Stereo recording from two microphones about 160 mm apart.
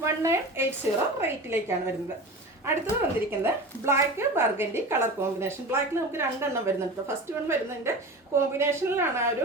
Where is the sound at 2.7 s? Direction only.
20° right (ahead or behind).